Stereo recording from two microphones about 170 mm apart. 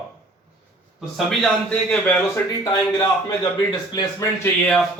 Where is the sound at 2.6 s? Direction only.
25° left (ahead or behind).